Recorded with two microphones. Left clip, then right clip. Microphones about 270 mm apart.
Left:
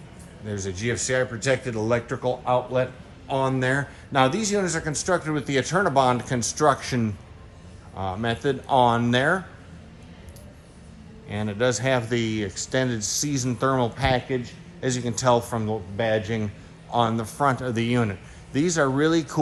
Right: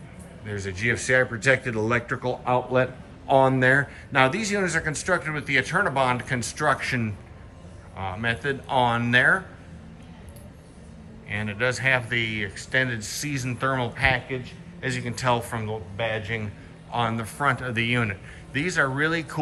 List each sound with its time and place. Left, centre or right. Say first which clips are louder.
0.4 s speech: right 2 dB; centre
11.3 s speech: left 2 dB; centre